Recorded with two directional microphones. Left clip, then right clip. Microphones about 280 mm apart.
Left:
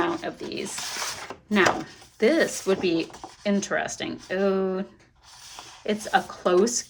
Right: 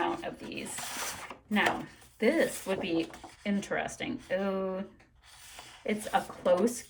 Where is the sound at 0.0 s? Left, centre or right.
Centre.